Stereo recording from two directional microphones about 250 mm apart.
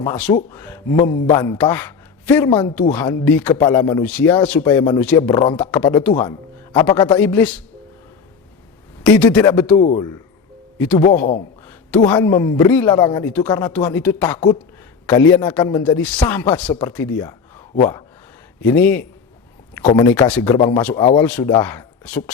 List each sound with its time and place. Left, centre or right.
0.0 s a man's voice: centre
2.5 s speech: left
2.9 s a man's voice: centre
6.1 s a man's voice: centre
9.1 s a man's voice: centre
9.7 s speech: left
12.1 s a man's voice: centre
19.8 s speech: centre
20.1 s a man's voice: centre
20.6 s speech: centre